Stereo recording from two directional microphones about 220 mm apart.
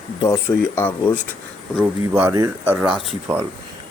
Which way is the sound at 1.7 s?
5° right (ahead or behind).